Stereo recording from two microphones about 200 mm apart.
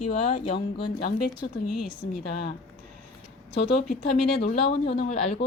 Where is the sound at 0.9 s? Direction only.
50° left (ahead or behind).